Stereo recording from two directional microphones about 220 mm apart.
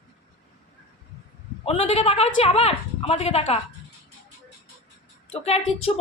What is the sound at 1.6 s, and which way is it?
A woman's voice, 25° left (ahead or behind).